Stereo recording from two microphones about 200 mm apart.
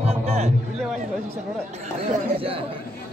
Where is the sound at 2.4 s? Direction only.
30° right (ahead or behind).